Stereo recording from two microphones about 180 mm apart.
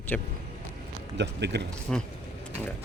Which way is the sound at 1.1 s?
70° right (ahead or behind).